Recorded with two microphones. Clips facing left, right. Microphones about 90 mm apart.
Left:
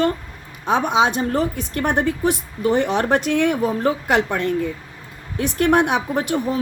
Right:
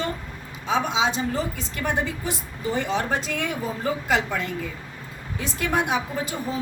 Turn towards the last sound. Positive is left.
turn(degrees=65)  # may be behind; listen again after turning